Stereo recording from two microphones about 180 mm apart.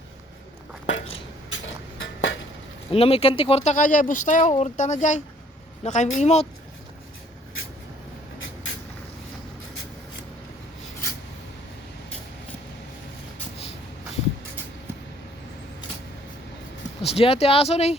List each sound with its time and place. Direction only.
0.9 s a sound: 90° left
2.9 s a woman's voice: 35° left (ahead or behind)
17.0 s speech: 35° left (ahead or behind)